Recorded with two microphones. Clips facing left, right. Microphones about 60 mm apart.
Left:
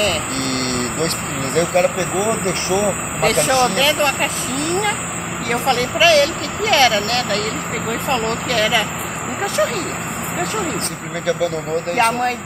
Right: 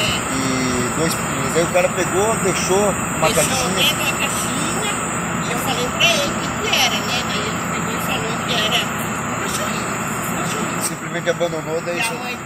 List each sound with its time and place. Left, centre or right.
0.5 s vehicle: centre
0.9 s speech: centre
2.1 s speech: centre
5.7 s speech: left